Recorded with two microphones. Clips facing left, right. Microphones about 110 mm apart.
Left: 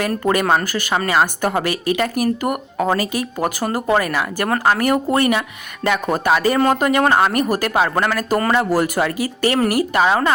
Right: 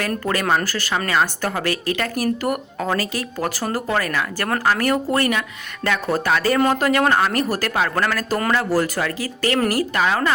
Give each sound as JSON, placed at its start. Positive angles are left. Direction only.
{"t": 0.5, "sound": "a woman's voice", "side_deg": 15}
{"t": 6.6, "sound": "speech", "side_deg": 0}
{"t": 7.1, "sound": "a woman's voice", "side_deg": 15}
{"t": 8.3, "sound": "speech", "side_deg": 5}
{"t": 8.5, "sound": "a woman's voice", "side_deg": 20}